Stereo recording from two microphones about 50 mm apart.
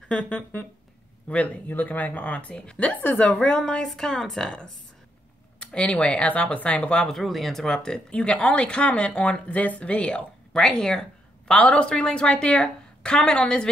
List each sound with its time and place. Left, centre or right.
0.1 s speech: left
2.8 s speech: left
3.2 s speech: left
7.1 s speech: centre